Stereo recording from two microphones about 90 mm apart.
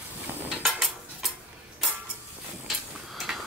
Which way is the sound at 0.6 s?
Centre (ahead or behind).